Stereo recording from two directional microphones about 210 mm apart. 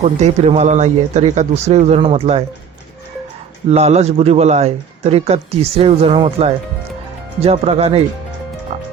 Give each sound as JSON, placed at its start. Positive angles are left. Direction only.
{"t": 0.0, "sound": "speech", "side_deg": -30}
{"t": 3.7, "sound": "speech", "side_deg": -30}
{"t": 8.7, "sound": "music", "side_deg": -30}